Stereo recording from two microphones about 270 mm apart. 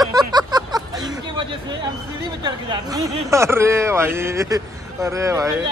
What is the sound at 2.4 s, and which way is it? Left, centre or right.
Speech, centre.